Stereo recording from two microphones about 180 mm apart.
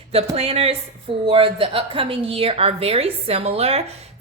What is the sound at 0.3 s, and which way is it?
A woman's voice, 35° right (ahead or behind).